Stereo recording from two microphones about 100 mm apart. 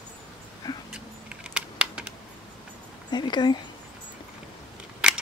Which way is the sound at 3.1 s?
45° left (ahead or behind).